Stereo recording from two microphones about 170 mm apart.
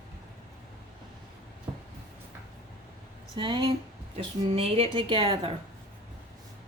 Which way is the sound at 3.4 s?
30° right (ahead or behind).